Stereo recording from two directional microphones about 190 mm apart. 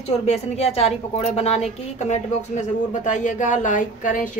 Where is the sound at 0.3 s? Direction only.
35° left (ahead or behind).